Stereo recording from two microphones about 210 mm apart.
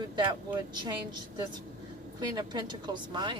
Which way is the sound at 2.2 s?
20° right (ahead or behind).